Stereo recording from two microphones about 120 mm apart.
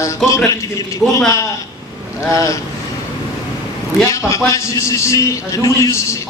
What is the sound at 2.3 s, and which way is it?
Speech, 25° left (ahead or behind).